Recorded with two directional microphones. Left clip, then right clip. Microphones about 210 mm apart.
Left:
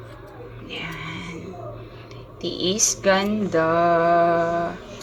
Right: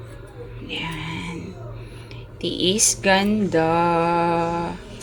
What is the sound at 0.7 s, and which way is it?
Music, 20° right (ahead or behind).